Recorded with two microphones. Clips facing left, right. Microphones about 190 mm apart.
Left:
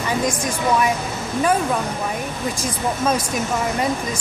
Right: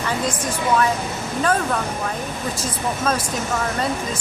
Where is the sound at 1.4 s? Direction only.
10° left (ahead or behind).